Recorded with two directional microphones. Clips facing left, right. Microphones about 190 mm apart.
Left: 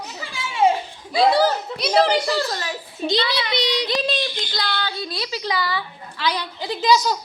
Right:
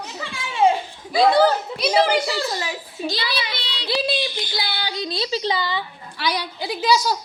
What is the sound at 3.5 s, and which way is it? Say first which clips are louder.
Child singing: left 11 dB; 15° left (ahead or behind).